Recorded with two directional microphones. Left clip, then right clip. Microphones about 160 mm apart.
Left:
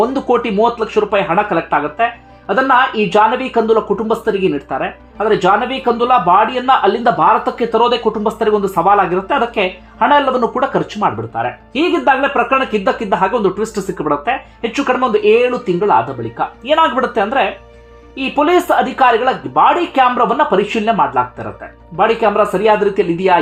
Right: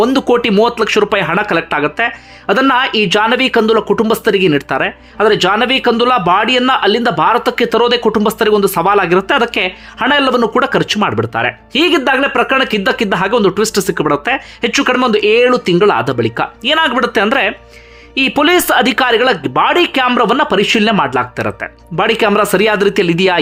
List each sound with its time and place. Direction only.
0.0 s speech: 25° right (ahead or behind)
16.6 s speech: 15° right (ahead or behind)